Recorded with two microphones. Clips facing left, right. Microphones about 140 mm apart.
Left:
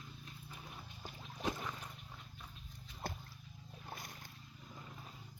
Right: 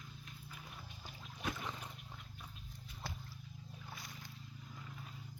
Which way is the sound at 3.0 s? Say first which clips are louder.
Left 4 dB; 50° left (ahead or behind).